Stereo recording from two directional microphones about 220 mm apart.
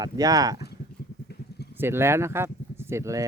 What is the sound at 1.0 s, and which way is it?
Vehicle, 45° left (ahead or behind).